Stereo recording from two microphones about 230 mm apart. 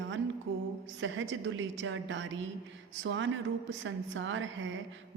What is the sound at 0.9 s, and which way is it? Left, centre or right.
A woman's voice, right.